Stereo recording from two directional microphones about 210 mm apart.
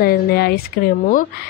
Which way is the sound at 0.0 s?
45° left (ahead or behind).